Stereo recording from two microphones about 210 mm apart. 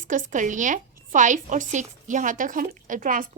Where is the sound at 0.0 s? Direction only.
40° right (ahead or behind).